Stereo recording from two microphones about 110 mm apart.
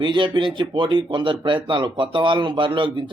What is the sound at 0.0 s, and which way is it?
Speech, 50° right (ahead or behind).